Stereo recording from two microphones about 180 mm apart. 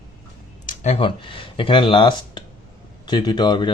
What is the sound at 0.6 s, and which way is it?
Speech, 35° left (ahead or behind).